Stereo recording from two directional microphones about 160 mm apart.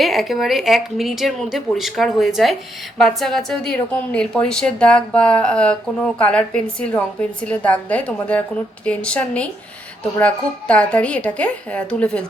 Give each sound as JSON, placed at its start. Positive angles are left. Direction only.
{"t": 0.0, "sound": "a woman's voice", "side_deg": 0}